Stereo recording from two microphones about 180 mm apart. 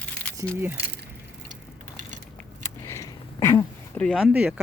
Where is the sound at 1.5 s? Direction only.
45° right (ahead or behind).